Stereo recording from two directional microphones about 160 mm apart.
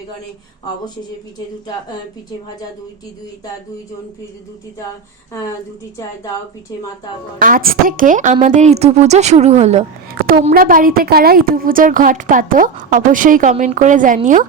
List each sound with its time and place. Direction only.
7.3 s a woman's voice: 65° right (ahead or behind); by 9.8 s 45° right (ahead or behind)
10.1 s a woman's voice: 65° right (ahead or behind)